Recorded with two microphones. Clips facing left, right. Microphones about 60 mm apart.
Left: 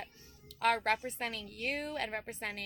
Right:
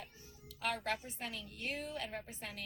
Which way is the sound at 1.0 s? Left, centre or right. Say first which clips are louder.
Left 6 dB; left.